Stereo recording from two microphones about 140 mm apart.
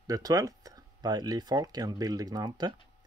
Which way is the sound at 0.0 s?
25° right (ahead or behind).